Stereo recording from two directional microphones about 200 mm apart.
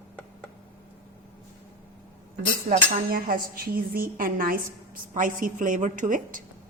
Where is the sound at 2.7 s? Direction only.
45° right (ahead or behind).